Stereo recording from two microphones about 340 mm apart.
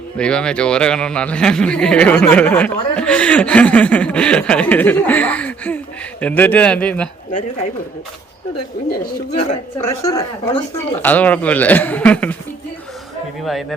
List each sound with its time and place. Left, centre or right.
0.2 s a man's voice: centre
8.9 s a man's voice: left
9.8 s speech: left
10.1 s a man's voice: centre
13.4 s a man's voice: centre